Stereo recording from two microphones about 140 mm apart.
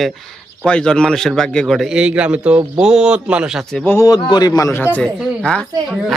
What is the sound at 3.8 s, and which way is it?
A man's voice, 20° left (ahead or behind).